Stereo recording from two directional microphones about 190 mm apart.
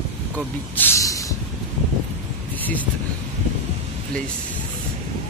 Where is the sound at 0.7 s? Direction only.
15° left (ahead or behind).